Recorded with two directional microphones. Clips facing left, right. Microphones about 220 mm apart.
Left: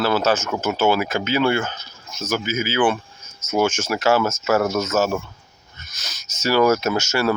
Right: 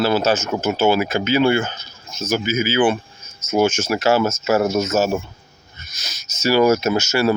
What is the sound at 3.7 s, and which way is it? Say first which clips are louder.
Speech: right 2 dB; 20° right (ahead or behind).